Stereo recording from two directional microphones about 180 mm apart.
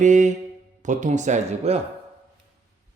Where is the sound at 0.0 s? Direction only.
40° right (ahead or behind).